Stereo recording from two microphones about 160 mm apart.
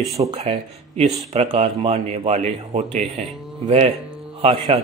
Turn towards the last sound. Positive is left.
turn(degrees=-35)  # may be behind; listen again after turning